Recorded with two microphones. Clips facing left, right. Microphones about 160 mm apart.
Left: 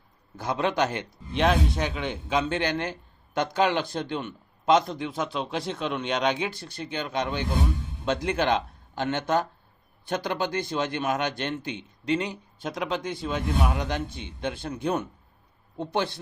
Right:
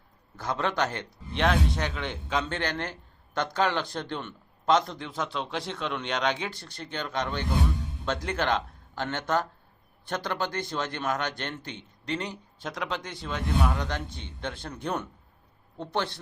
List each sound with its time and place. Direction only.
0.3 s a man's voice: 15° left (ahead or behind)